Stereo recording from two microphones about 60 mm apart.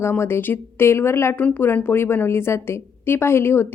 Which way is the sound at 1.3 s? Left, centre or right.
Left.